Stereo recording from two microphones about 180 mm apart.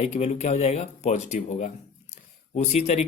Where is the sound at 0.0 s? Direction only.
35° left (ahead or behind).